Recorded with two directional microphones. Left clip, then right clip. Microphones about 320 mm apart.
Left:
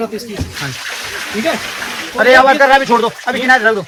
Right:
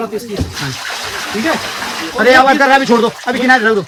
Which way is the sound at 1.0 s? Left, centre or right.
Right.